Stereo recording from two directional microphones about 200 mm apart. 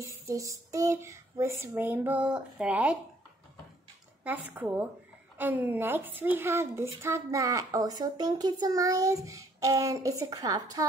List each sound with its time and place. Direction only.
0.0 s a woman's voice: 15° right (ahead or behind)
4.2 s a woman's voice: 10° right (ahead or behind)